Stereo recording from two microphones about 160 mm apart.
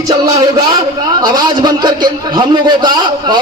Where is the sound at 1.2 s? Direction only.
25° right (ahead or behind).